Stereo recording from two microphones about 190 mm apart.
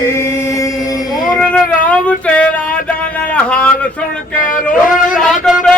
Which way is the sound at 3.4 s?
5° left (ahead or behind).